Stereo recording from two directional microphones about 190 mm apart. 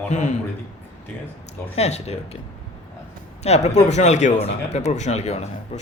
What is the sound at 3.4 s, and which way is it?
Speech, 35° left (ahead or behind).